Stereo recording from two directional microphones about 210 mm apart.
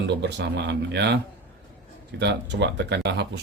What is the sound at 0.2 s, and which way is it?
Speech, 55° right (ahead or behind).